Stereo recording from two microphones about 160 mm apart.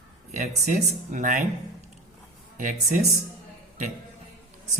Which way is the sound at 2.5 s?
55° right (ahead or behind).